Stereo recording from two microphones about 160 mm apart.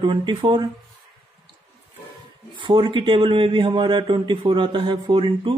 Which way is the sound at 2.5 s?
30° right (ahead or behind).